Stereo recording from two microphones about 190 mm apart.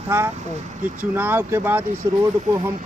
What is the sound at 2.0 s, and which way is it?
Speech, 20° right (ahead or behind).